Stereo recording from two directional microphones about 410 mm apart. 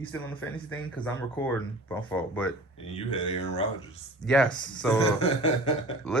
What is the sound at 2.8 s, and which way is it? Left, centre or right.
Speech, centre.